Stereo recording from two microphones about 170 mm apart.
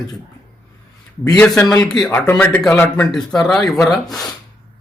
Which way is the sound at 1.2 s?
5° left (ahead or behind).